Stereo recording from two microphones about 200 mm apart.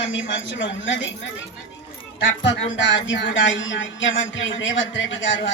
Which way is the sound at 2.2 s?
65° left (ahead or behind).